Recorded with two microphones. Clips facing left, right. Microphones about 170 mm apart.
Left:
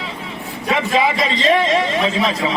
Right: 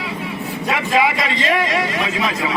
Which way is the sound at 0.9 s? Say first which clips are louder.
Right 1 dB; 25° left (ahead or behind).